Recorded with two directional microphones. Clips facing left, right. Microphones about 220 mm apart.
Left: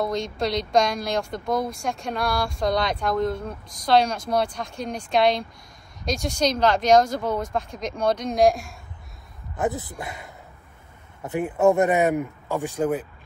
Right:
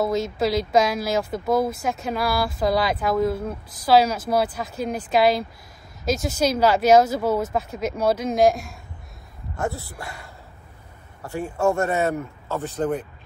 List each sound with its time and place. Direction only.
0.0 s speech: 5° right (ahead or behind)
9.6 s speech: 20° left (ahead or behind)